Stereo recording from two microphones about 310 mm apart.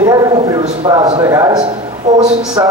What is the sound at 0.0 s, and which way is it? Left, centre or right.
A man's voice, centre.